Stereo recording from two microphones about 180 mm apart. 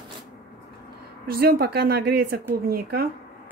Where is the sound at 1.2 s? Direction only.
55° right (ahead or behind).